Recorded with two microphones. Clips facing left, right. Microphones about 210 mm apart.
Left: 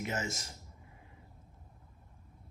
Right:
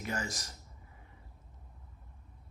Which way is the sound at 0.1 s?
25° left (ahead or behind).